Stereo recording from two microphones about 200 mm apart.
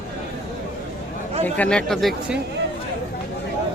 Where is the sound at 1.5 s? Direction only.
5° left (ahead or behind).